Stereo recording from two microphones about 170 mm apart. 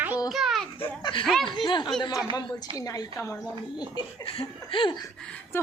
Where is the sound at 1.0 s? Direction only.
25° left (ahead or behind).